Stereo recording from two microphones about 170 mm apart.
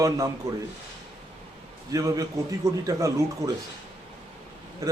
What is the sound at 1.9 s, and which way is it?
A man's voice, 20° right (ahead or behind).